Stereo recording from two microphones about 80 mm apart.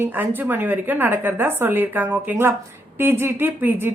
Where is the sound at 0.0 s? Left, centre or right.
Right.